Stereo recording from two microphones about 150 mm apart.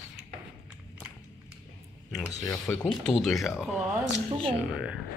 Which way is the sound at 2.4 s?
20° left (ahead or behind).